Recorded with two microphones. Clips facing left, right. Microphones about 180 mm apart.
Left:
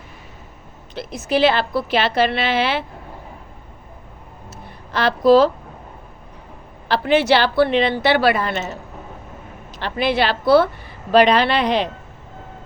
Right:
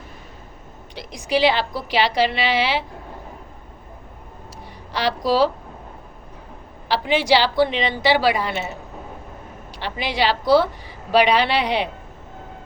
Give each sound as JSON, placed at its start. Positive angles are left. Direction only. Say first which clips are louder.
{"t": 0.9, "sound": "a woman's voice", "louder": "left 2 dB", "side_deg": -15}
{"t": 4.9, "sound": "a woman's voice", "louder": "left 7 dB", "side_deg": -15}
{"t": 7.1, "sound": "a woman's voice", "louder": "left 3 dB", "side_deg": -15}